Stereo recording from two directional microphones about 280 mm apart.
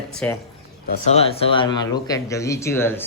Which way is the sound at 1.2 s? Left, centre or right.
Centre.